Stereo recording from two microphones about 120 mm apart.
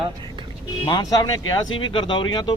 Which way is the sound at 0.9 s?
35° left (ahead or behind).